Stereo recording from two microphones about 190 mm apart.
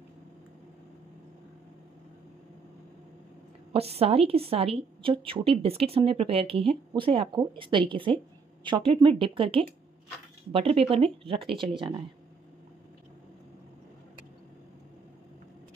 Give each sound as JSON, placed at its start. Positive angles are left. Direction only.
{"t": 3.7, "sound": "a woman's voice", "side_deg": -30}